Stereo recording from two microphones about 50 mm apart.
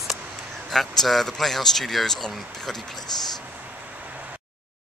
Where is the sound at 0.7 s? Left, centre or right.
Centre.